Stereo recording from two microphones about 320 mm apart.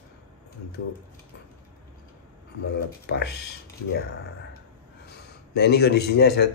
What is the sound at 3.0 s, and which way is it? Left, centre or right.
Speech, left.